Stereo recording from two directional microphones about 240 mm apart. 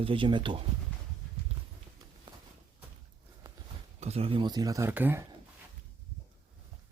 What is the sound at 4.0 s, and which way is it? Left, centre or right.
Speech, right.